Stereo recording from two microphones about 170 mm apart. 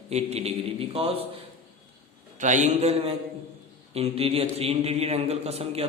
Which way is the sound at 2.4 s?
45° right (ahead or behind).